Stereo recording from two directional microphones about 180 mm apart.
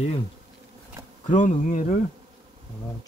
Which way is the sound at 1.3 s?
45° left (ahead or behind).